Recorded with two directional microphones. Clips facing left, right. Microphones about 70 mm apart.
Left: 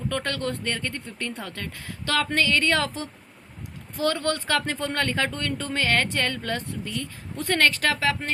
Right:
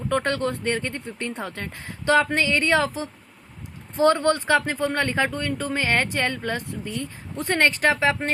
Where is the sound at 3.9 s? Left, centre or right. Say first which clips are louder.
Right 6 dB; right.